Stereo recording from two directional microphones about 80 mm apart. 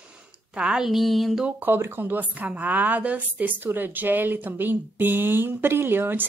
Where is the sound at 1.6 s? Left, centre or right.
Right.